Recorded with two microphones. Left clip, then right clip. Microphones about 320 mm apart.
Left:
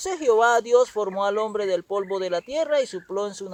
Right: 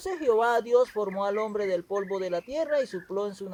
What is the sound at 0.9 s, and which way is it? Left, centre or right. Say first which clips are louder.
Speech: left 4 dB; left.